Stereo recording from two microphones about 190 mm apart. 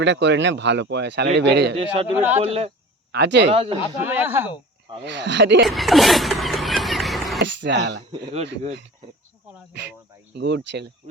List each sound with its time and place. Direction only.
0.0 s speech: 70° right (ahead or behind)
2.1 s speech: 10° right (ahead or behind)
2.4 s speech: 30° right (ahead or behind)
3.1 s speech: 65° right (ahead or behind)
3.5 s speech: 30° right (ahead or behind)
4.0 s speech: 10° right (ahead or behind)
5.0 s speech: 70° right (ahead or behind)
5.6 s a sound: centre (ahead or behind)
7.4 s a sound: 70° right (ahead or behind)
8.1 s speech: 30° right (ahead or behind)
10.3 s speech: 65° right (ahead or behind)